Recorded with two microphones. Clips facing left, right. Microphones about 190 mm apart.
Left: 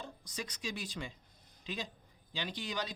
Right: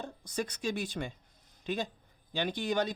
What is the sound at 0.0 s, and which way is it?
Speech, 55° right (ahead or behind).